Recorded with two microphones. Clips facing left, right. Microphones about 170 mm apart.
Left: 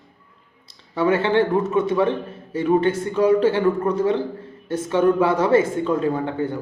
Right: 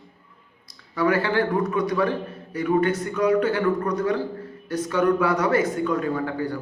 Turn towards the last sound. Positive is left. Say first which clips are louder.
# left 3 dB
turn(degrees=25)  # may be behind; listen again after turning